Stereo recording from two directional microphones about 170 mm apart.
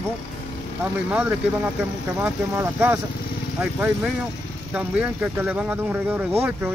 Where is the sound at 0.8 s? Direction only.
10° right (ahead or behind).